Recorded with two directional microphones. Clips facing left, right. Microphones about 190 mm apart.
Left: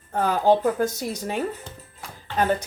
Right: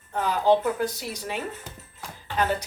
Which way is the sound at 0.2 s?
45° left (ahead or behind).